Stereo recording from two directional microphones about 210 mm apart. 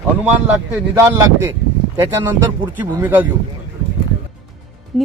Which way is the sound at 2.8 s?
10° right (ahead or behind).